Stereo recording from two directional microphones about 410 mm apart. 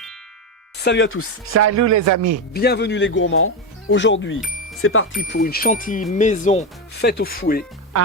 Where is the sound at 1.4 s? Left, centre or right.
Right.